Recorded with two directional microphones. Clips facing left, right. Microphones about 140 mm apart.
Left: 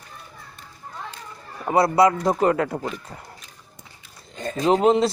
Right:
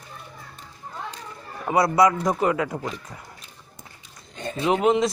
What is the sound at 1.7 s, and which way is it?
Speech, 25° left (ahead or behind).